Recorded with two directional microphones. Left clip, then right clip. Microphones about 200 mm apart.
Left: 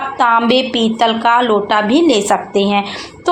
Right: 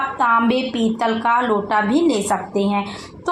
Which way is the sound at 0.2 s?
35° left (ahead or behind).